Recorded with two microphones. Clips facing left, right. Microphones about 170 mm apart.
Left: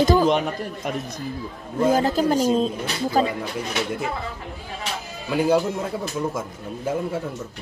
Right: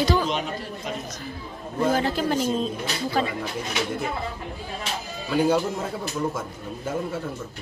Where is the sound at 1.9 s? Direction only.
40° left (ahead or behind).